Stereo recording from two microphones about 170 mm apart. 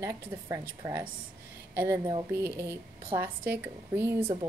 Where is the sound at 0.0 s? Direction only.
15° right (ahead or behind).